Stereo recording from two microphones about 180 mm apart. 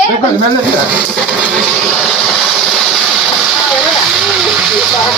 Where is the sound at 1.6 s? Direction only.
Centre (ahead or behind).